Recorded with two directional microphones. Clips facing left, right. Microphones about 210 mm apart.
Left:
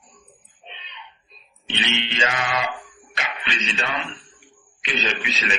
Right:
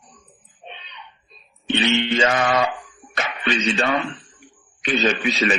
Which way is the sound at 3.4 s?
50° right (ahead or behind).